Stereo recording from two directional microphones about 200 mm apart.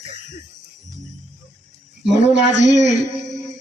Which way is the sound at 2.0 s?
60° right (ahead or behind).